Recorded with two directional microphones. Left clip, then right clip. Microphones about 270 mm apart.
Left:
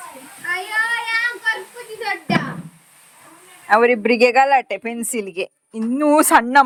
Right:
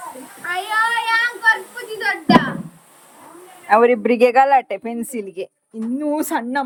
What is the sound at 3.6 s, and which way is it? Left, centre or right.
Speech, centre.